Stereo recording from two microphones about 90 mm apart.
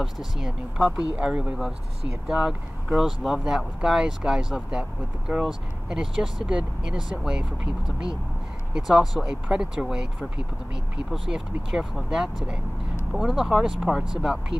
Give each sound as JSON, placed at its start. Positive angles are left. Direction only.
{"t": 0.0, "sound": "speech", "side_deg": -5}
{"t": 1.1, "sound": "speech", "side_deg": -15}
{"t": 2.2, "sound": "speech", "side_deg": -5}